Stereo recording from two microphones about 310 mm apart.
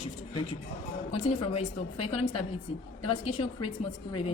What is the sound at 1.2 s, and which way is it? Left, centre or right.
Speech, centre.